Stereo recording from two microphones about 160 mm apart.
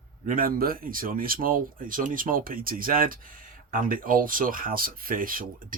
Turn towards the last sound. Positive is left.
turn(degrees=-60)  # may be behind; listen again after turning